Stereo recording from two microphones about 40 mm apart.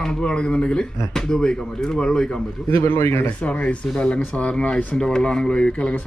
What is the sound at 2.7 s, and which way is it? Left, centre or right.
Speech, left.